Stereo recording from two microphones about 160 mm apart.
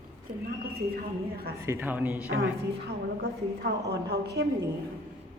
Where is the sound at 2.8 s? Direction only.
90° right.